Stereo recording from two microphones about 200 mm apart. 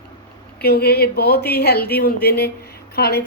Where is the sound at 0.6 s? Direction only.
50° left (ahead or behind).